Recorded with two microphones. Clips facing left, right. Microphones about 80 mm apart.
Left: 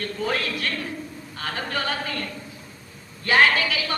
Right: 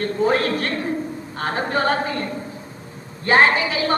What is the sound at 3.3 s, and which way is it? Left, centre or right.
Speech, right.